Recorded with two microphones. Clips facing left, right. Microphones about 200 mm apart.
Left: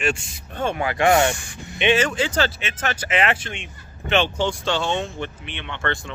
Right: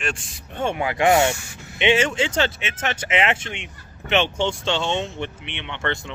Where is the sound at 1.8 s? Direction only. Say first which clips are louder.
Even; 25° right (ahead or behind).